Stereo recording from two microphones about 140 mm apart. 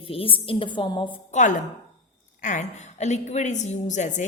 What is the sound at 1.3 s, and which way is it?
A woman's voice, 65° left (ahead or behind).